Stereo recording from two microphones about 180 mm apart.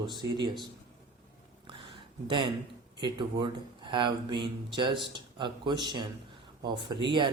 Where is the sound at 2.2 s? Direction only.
25° right (ahead or behind).